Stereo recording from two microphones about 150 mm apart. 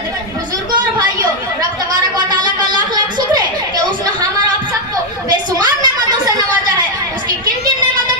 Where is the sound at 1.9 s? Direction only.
25° right (ahead or behind).